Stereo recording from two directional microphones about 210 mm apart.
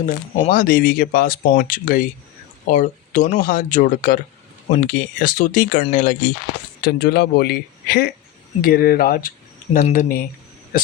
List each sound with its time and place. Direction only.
0.0 s speech: 40° left (ahead or behind)
6.8 s a man's voice: 50° left (ahead or behind)